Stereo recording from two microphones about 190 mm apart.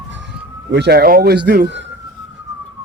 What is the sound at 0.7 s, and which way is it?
Speech, 60° right (ahead or behind).